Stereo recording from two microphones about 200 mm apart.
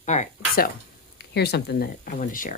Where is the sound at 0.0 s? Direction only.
35° left (ahead or behind).